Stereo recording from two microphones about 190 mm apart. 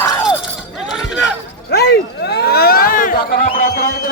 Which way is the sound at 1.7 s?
60° left (ahead or behind).